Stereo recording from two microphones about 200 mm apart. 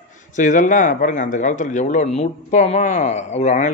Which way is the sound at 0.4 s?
40° left (ahead or behind).